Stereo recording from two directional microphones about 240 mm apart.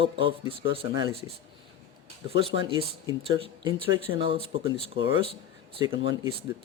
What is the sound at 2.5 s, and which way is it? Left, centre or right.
Speech, right.